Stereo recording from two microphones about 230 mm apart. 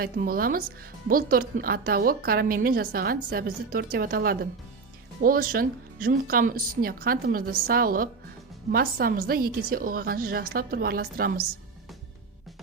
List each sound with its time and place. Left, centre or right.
0.0 s a woman's voice: right